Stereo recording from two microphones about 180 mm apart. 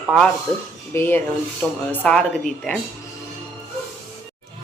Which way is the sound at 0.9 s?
10° left (ahead or behind).